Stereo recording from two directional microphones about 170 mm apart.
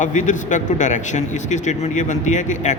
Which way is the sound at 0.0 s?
45° left (ahead or behind).